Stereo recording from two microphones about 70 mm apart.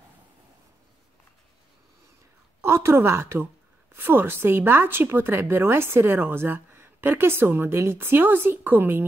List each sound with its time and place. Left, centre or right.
2.6 s a woman's voice: right